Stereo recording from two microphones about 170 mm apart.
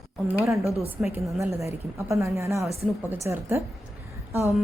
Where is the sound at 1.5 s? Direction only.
15° right (ahead or behind).